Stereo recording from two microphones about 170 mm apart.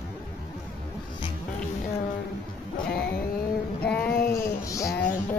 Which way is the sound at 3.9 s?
5° left (ahead or behind).